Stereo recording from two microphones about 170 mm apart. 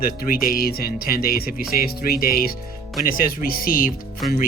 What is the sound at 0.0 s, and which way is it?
Speech, 60° left (ahead or behind).